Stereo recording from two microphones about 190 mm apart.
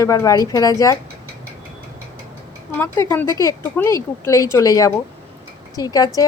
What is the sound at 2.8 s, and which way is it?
A woman's voice, 10° left (ahead or behind).